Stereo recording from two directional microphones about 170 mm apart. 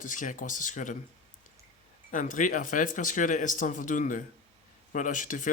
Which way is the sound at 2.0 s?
50° left (ahead or behind).